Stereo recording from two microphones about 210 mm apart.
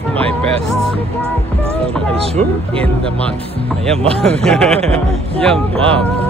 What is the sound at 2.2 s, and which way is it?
Speech, 30° right (ahead or behind).